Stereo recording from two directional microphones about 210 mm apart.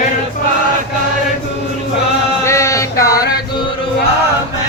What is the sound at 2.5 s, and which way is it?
Music, 15° left (ahead or behind).